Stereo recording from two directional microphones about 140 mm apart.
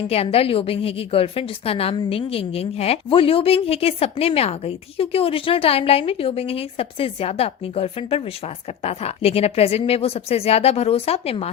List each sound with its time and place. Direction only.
0.1 s a woman's voice: 45° left (ahead or behind)